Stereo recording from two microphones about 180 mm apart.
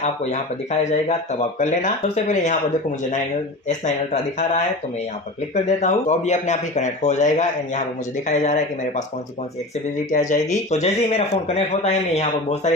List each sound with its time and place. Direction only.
0.0 s speech: 40° left (ahead or behind)
3.7 s speech: 40° left (ahead or behind)
5.5 s speech: 40° left (ahead or behind)
10.1 s speech: 40° left (ahead or behind)